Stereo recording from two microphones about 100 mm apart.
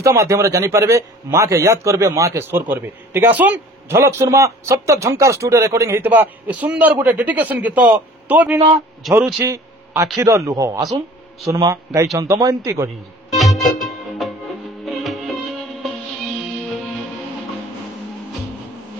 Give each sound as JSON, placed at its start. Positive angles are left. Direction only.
{"t": 0.0, "sound": "a man's voice", "side_deg": -30}
{"t": 4.0, "sound": "speech", "side_deg": -30}
{"t": 6.0, "sound": "a man's voice", "side_deg": -15}
{"t": 13.3, "sound": "music", "side_deg": 0}